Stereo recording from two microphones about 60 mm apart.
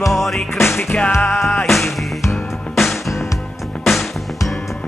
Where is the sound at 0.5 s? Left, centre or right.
Left.